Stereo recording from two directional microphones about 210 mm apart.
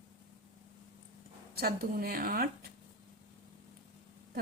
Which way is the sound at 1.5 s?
45° right (ahead or behind).